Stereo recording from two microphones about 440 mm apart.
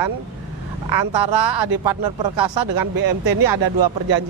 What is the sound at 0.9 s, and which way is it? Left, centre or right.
Speech, right.